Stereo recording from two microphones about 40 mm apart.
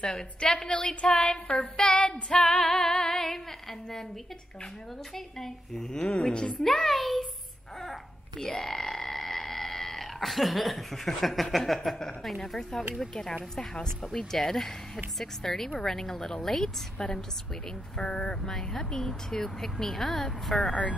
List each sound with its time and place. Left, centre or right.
0.0 s a woman's voice: left
2.4 s music: centre
5.1 s speech: centre
6.0 s a woman's voice: left; by 7.2 s centre
7.8 s frog: centre
11.5 s a sound: centre
12.2 s speech: centre